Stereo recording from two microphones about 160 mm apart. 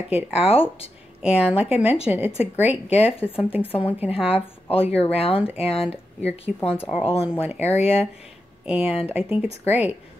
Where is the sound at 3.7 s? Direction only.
35° left (ahead or behind).